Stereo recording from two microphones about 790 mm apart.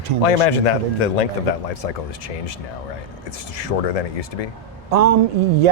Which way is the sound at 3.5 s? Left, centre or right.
Left.